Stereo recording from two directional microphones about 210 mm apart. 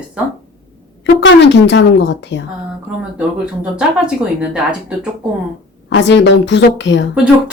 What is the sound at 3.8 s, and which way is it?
Speech, 5° right (ahead or behind).